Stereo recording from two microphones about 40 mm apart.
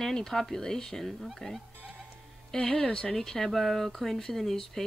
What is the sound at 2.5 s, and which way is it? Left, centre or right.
Speech, centre.